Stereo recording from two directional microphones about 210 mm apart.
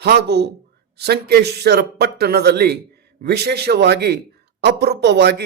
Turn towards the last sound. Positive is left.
turn(degrees=-50)  # may be behind; listen again after turning